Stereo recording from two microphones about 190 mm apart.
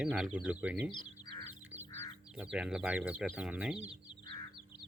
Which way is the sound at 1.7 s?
10° right (ahead or behind).